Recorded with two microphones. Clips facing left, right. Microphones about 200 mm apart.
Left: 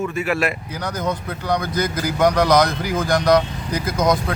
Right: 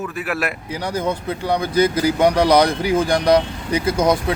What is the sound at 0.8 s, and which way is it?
Speech, 30° right (ahead or behind).